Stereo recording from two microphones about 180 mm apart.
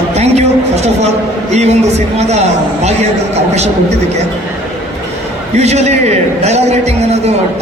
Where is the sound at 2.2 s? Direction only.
35° right (ahead or behind).